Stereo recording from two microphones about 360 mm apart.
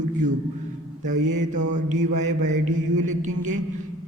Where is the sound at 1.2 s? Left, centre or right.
Centre.